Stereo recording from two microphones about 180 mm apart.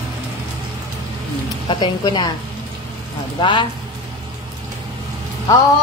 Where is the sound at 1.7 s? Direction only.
25° left (ahead or behind).